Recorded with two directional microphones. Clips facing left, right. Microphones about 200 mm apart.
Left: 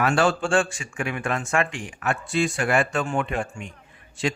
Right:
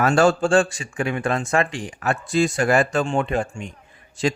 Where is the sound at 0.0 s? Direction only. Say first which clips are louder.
Right 4 dB; 40° right (ahead or behind).